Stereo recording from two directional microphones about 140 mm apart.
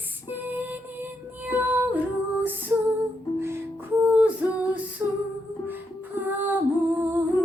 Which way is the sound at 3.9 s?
10° right (ahead or behind).